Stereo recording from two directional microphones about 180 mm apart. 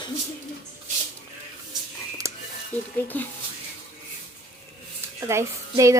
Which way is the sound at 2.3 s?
15° right (ahead or behind).